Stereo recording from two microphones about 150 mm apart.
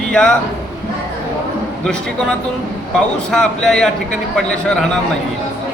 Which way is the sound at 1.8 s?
5° left (ahead or behind).